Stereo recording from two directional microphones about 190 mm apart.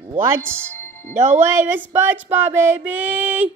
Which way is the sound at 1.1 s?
40° right (ahead or behind).